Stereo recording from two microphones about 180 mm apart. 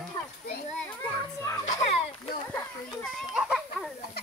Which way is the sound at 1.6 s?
40° left (ahead or behind).